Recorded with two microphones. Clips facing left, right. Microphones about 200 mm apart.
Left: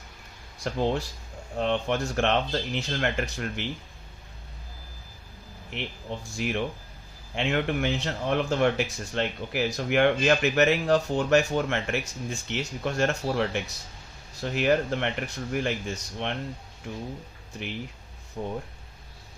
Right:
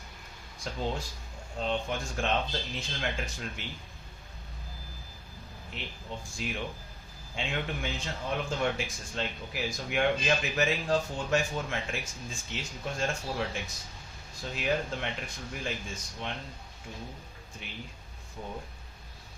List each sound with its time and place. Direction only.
0.6 s speech: 70° left (ahead or behind)
5.7 s speech: 70° left (ahead or behind)
18.4 s speech: 80° left